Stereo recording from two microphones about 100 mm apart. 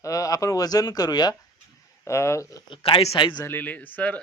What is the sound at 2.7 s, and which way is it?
Speech, 65° left (ahead or behind).